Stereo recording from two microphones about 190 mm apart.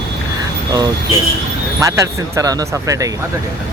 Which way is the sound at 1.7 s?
15° right (ahead or behind).